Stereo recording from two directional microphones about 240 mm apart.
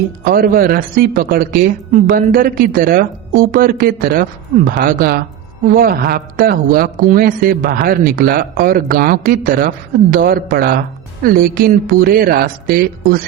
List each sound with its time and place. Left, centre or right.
0.3 s speech: right